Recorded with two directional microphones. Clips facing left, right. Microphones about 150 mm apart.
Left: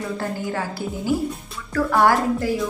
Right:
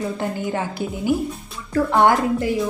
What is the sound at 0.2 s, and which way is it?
A woman's voice, 20° right (ahead or behind).